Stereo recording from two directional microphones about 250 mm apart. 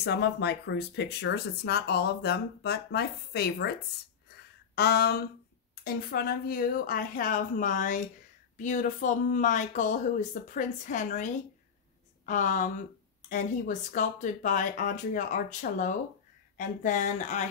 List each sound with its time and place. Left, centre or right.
0.0 s speech: left
4.7 s speech: left
12.3 s speech: left